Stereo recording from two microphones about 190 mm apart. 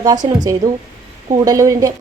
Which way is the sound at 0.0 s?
20° right (ahead or behind).